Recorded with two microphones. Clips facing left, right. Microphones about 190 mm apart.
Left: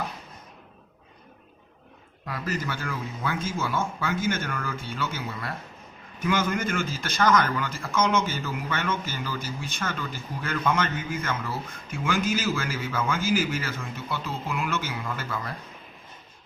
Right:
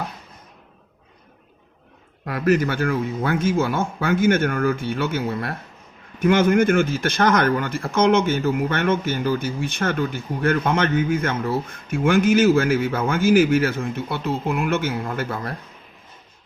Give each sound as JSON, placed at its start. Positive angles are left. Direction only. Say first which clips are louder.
{"t": 2.2, "sound": "speech", "louder": "right 12 dB", "side_deg": -60}